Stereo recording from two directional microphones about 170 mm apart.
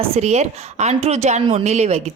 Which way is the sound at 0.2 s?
40° right (ahead or behind).